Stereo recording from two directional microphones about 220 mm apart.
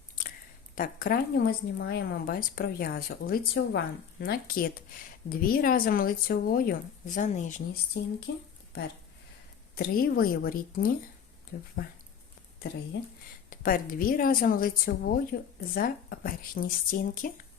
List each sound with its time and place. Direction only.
0.8 s a woman's voice: 40° left (ahead or behind)
8.3 s speech: 50° left (ahead or behind)
9.7 s a woman's voice: 40° left (ahead or behind)
13.5 s a woman's voice: 40° left (ahead or behind)